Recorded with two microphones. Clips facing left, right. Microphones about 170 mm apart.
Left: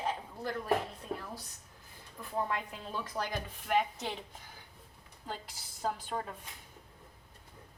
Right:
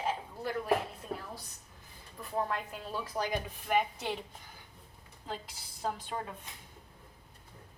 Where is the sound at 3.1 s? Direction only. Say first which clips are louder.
Right 5 dB; 10° right (ahead or behind).